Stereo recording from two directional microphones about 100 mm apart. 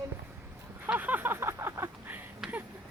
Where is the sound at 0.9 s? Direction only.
15° right (ahead or behind).